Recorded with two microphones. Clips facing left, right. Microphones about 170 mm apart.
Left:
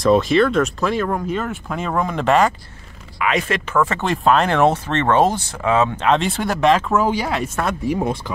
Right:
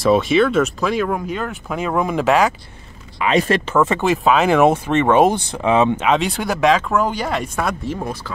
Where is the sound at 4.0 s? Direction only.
5° right (ahead or behind).